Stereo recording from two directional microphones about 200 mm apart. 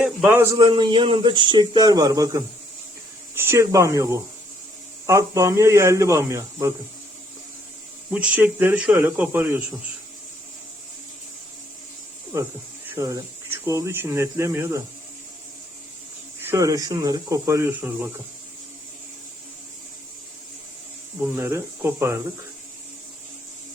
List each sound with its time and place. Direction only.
0.0 s a man's voice: 5° right (ahead or behind)
0.5 s speech: 20° right (ahead or behind)
8.1 s speech: 5° right (ahead or behind)
12.9 s speech: 15° right (ahead or behind)
16.4 s speech: 15° right (ahead or behind)
21.2 s speech: 10° right (ahead or behind)